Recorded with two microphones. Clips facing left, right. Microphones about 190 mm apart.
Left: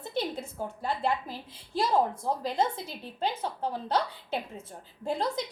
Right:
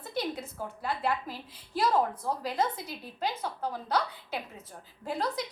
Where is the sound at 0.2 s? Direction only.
25° left (ahead or behind).